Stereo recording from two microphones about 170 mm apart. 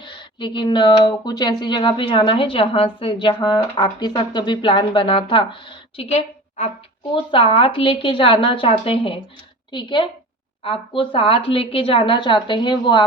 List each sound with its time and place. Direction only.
0.0 s a woman's voice: 30° left (ahead or behind)